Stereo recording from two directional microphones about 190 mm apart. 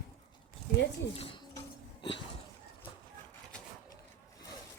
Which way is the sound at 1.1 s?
30° left (ahead or behind).